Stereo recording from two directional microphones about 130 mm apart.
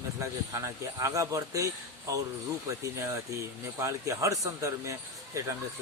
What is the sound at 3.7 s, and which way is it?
Speech, 20° right (ahead or behind).